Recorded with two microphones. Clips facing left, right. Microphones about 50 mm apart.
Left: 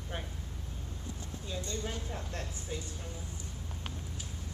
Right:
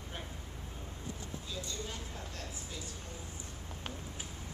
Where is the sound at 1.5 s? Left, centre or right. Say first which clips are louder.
Left 5 dB; left.